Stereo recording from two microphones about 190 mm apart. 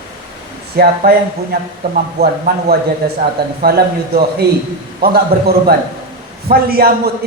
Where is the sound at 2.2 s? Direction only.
55° right (ahead or behind).